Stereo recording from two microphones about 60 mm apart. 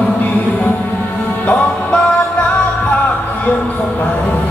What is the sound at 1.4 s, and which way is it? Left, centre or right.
Music, left.